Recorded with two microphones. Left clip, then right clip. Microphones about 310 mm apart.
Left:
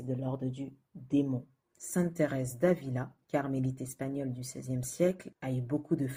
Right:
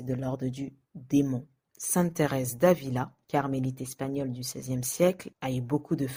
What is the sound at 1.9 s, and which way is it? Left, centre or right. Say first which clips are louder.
Speech: right 4 dB; right.